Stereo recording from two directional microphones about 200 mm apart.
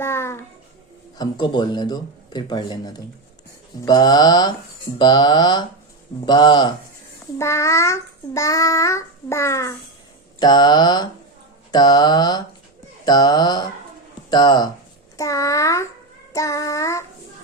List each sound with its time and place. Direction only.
0.0 s music: 10° left (ahead or behind)
1.2 s speech: 20° left (ahead or behind)
7.3 s child singing: 15° left (ahead or behind)
10.4 s speech: 20° left (ahead or behind)
15.2 s child singing: 15° left (ahead or behind)